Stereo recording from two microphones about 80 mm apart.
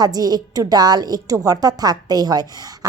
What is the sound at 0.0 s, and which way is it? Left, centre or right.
A woman's voice, right.